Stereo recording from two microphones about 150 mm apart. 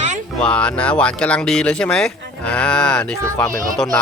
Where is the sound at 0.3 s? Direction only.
5° left (ahead or behind).